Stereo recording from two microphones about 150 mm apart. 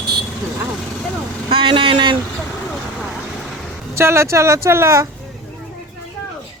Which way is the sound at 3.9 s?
15° right (ahead or behind).